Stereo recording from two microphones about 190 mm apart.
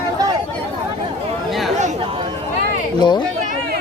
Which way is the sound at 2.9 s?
25° left (ahead or behind).